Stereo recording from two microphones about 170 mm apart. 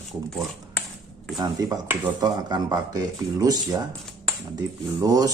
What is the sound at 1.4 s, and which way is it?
Speech, 25° right (ahead or behind).